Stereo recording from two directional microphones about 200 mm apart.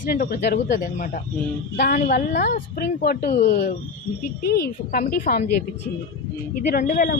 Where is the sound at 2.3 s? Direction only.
40° left (ahead or behind).